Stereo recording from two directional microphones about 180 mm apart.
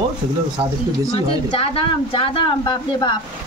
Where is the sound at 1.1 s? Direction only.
30° left (ahead or behind).